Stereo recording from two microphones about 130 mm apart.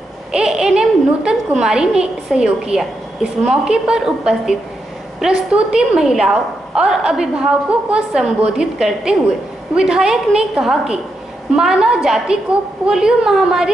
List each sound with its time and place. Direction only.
0.3 s a woman's voice: 5° right (ahead or behind)